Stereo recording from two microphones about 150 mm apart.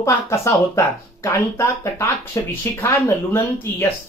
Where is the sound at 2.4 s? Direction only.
20° left (ahead or behind).